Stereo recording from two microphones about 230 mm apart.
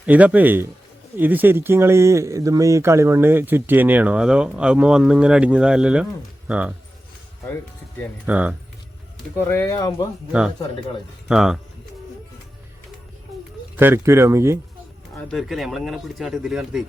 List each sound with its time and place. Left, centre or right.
0.0 s speech: centre
8.3 s speech: centre
9.1 s speech: centre
11.3 s speech: centre
13.7 s speech: centre
15.1 s speech: centre